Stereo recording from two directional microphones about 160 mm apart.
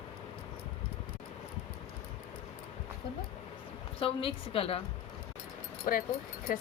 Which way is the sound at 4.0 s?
35° left (ahead or behind).